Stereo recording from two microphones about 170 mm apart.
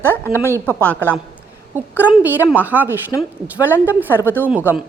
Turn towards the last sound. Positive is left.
turn(degrees=-10)  # may be behind; listen again after turning